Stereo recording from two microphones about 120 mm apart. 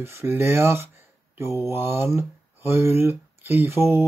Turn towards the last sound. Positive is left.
turn(degrees=-20)  # may be behind; listen again after turning